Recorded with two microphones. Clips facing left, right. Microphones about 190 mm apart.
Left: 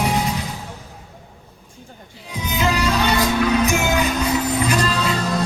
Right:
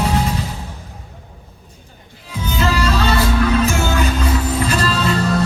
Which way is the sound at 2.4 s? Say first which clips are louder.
Right 1 dB; 15° left (ahead or behind).